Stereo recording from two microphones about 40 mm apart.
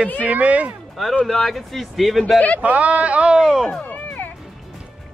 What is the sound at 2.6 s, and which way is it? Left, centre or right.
Speech, right.